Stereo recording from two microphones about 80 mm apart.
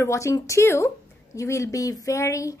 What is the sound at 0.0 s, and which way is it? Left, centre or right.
A woman's voice, left.